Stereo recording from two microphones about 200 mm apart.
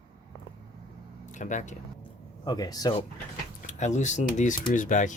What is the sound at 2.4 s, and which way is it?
Speech, 20° left (ahead or behind).